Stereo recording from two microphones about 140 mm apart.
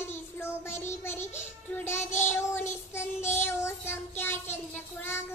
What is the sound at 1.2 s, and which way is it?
Music, 55° left (ahead or behind).